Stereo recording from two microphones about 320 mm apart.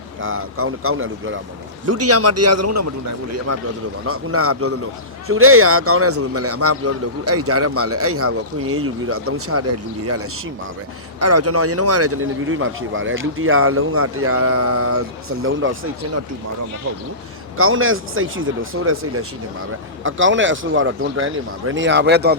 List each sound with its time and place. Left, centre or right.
0.2 s a man's voice: right
4.0 s a man's voice: right
11.2 s a man's voice: right
17.6 s speech: right